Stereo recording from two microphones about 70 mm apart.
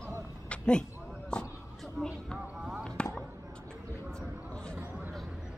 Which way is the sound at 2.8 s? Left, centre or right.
Centre.